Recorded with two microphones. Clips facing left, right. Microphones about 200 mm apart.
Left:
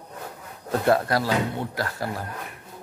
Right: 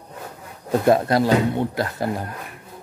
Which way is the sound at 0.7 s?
20° right (ahead or behind).